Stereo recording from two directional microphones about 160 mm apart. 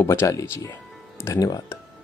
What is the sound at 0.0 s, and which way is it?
Speech, 15° left (ahead or behind).